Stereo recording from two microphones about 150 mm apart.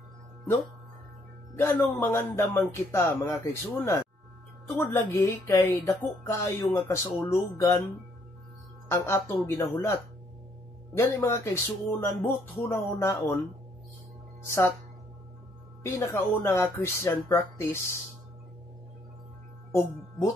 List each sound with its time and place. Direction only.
1.6 s speech: 10° left (ahead or behind)
11.0 s speech: 20° left (ahead or behind)
14.4 s speech: 15° left (ahead or behind)
15.8 s speech: 20° left (ahead or behind)
19.7 s speech: 15° left (ahead or behind)